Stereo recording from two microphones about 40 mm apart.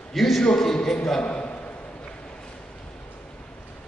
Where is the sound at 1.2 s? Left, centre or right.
Left.